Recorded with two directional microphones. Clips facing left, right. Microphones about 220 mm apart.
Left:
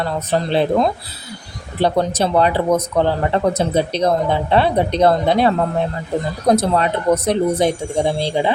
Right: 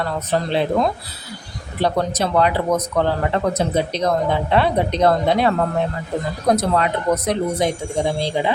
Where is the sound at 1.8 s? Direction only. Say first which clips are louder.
Left 3 dB; 30° left (ahead or behind).